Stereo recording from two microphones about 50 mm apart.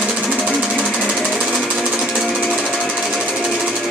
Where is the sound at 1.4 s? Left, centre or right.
Centre.